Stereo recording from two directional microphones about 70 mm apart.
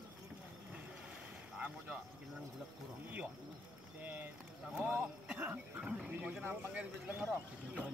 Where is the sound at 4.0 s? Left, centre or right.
Right.